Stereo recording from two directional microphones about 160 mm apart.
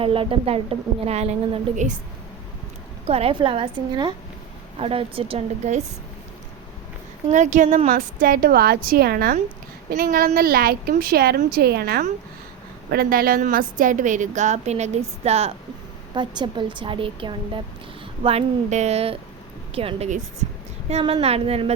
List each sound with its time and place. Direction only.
0.0 s a woman's voice: 35° right (ahead or behind); by 2.0 s 50° right (ahead or behind)
3.1 s a woman's voice: 40° right (ahead or behind)
7.3 s a woman's voice: 50° right (ahead or behind)
8.2 s a woman's voice: 65° right (ahead or behind)
12.9 s a woman's voice: 65° right (ahead or behind); by 15.5 s 40° right (ahead or behind)
16.1 s a woman's voice: 30° right (ahead or behind)